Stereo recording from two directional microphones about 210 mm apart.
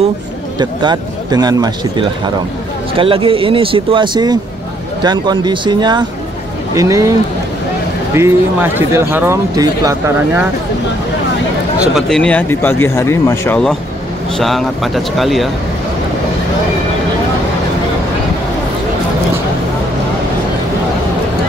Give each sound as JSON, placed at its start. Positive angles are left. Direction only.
{"t": 0.6, "sound": "speech", "side_deg": -20}
{"t": 8.1, "sound": "speech", "side_deg": -10}
{"t": 11.9, "sound": "speech", "side_deg": 5}